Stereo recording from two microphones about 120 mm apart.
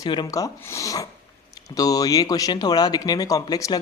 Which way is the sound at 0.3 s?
30° left (ahead or behind).